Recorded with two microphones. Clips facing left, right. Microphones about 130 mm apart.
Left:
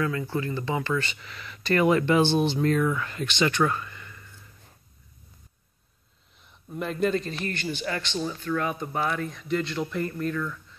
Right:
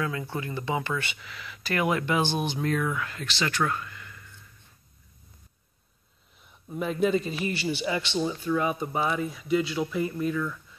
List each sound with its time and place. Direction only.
0.0 s a man's voice: 15° right (ahead or behind)
1.2 s speech: centre (ahead or behind)
6.7 s a man's voice: 5° right (ahead or behind)